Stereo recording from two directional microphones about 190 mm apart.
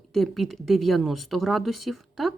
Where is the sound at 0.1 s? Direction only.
Centre (ahead or behind).